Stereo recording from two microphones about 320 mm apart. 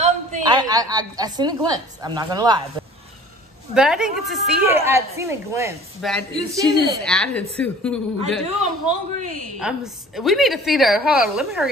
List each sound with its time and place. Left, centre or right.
0.0 s a woman's voice: centre
3.7 s a woman's voice: centre
8.5 s a woman's voice: right
9.6 s a woman's voice: centre